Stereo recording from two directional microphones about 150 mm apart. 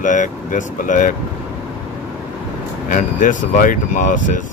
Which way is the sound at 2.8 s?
60° left (ahead or behind).